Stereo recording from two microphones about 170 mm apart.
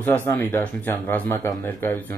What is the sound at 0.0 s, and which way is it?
Speech, 10° left (ahead or behind).